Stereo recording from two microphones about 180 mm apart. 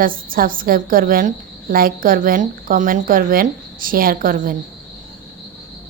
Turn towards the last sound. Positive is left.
turn(degrees=-50)  # may be behind; listen again after turning